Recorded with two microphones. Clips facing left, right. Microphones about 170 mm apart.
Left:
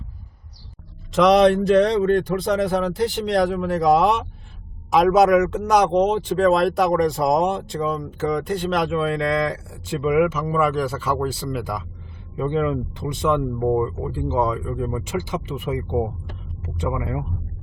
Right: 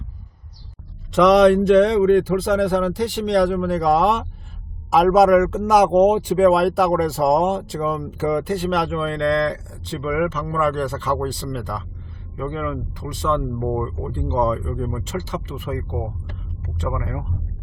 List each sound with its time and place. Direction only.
1.1 s speech: centre (ahead or behind)
12.5 s speech: 25° left (ahead or behind)
13.6 s speech: 5° left (ahead or behind)